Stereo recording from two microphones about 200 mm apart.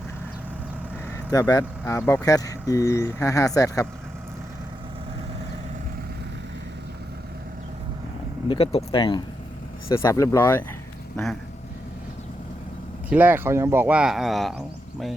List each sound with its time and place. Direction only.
1.3 s speech: 15° left (ahead or behind)
8.4 s speech: 30° left (ahead or behind)
9.9 s speech: 15° left (ahead or behind)
13.1 s speech: 10° right (ahead or behind)